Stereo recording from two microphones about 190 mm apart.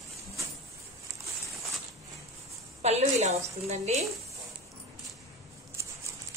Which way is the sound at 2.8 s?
35° right (ahead or behind).